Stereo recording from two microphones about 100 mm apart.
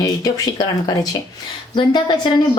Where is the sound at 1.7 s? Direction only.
50° left (ahead or behind).